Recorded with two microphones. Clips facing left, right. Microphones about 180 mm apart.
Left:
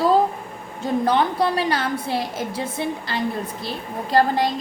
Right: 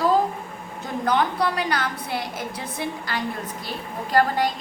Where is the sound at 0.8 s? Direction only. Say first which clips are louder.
Left 3 dB; 30° left (ahead or behind).